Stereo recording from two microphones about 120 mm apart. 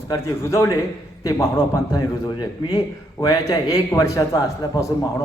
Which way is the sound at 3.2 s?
30° left (ahead or behind).